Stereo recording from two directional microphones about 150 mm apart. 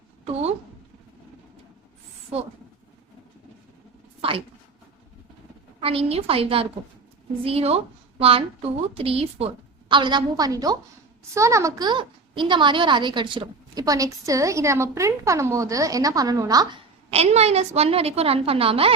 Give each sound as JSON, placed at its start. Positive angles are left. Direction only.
{"t": 2.3, "sound": "speech", "side_deg": -45}
{"t": 4.2, "sound": "a sound", "side_deg": -40}
{"t": 5.8, "sound": "a woman's voice", "side_deg": -40}
{"t": 17.1, "sound": "a woman's voice", "side_deg": -45}